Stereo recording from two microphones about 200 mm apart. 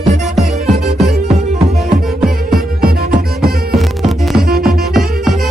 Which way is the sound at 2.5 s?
50° right (ahead or behind).